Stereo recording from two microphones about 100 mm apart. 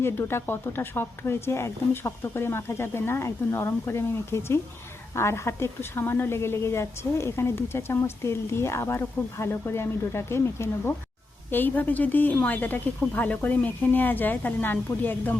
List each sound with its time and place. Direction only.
0.0 s a woman's voice: 25° left (ahead or behind)